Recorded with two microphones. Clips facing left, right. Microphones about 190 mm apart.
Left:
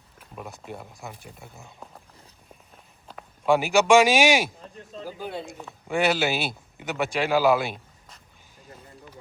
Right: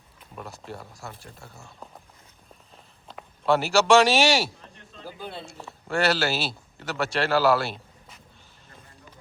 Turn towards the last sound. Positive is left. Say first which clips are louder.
# left 1 dB
turn(degrees=15)  # may be behind; listen again after turning